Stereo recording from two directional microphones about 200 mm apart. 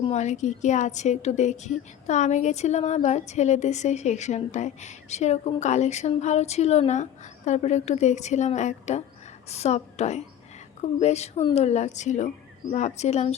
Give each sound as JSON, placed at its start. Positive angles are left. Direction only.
{"t": 0.0, "sound": "a woman's voice", "side_deg": 35}